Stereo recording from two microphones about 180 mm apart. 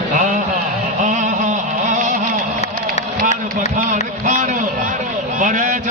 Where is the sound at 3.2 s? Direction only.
45° right (ahead or behind).